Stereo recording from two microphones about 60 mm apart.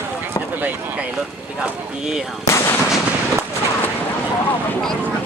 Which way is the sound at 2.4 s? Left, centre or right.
Left.